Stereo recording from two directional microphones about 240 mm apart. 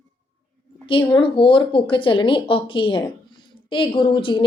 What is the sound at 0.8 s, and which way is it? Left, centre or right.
A woman's voice, left.